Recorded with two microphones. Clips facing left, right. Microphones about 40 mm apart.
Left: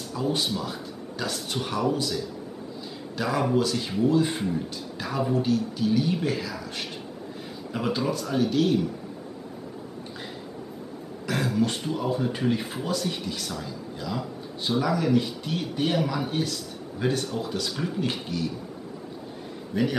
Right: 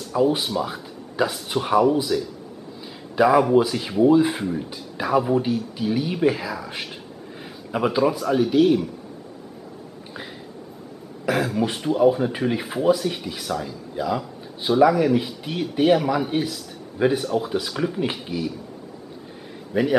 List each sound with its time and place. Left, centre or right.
0.1 s speech: centre
4.3 s speech: centre
11.2 s speech: centre
19.7 s speech: centre